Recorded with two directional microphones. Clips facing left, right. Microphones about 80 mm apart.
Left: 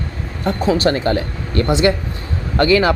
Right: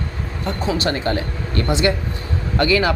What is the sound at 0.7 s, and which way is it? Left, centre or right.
Speech, left.